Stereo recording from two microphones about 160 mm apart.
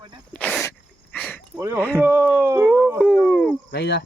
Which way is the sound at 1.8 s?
10° left (ahead or behind).